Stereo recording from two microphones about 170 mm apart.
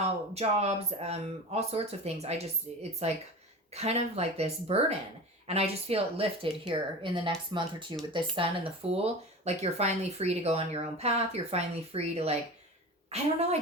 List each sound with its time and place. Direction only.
0.0 s a woman's voice: 40° right (ahead or behind)